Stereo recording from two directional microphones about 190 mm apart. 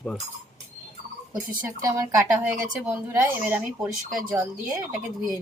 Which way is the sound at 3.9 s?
5° right (ahead or behind).